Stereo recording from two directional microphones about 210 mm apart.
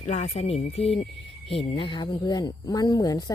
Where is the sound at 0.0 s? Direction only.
30° left (ahead or behind).